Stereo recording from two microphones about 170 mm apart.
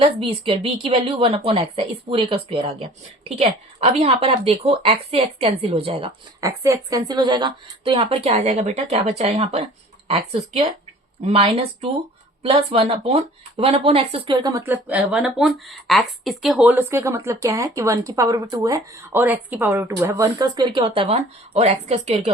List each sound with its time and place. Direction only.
0.0 s a woman's voice: 30° right (ahead or behind)
6.4 s a woman's voice: 20° right (ahead or behind); by 22.3 s 40° right (ahead or behind)